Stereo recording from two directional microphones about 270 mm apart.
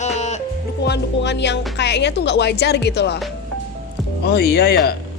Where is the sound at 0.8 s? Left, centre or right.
Left.